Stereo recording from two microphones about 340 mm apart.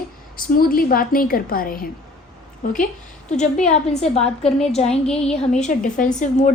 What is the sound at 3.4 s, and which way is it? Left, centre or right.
A woman's voice, centre.